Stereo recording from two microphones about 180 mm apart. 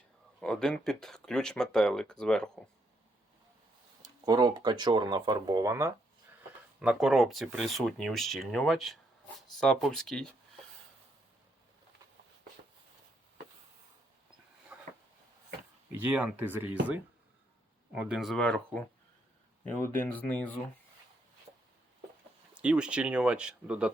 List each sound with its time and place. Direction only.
0.3 s speech: centre (ahead or behind)
4.0 s speech: 20° right (ahead or behind)
6.8 s speech: centre (ahead or behind)
14.7 s a sound: 5° right (ahead or behind)
16.1 s speech: 10° right (ahead or behind)
17.9 s speech: 5° right (ahead or behind)
22.5 s speech: 5° right (ahead or behind)